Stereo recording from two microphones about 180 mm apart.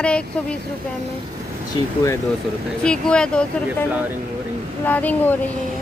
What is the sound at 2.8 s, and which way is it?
Speech, 5° left (ahead or behind).